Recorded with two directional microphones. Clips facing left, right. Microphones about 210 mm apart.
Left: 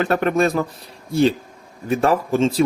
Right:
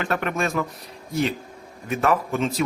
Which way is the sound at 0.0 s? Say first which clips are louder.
Left 7 dB; 35° left (ahead or behind).